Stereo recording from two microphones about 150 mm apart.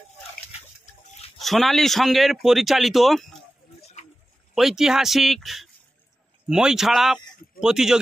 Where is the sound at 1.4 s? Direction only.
Centre (ahead or behind).